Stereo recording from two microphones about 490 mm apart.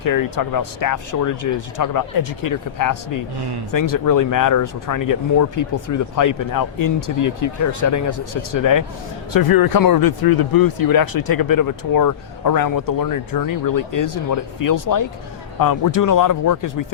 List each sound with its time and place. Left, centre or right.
0.0 s speech: left